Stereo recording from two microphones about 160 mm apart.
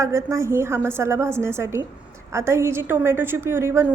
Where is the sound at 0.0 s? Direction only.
15° right (ahead or behind).